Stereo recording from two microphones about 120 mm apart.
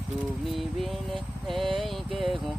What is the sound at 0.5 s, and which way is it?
Vehicle, centre (ahead or behind).